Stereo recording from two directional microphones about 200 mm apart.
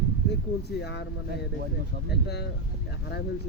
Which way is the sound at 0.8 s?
60° left (ahead or behind).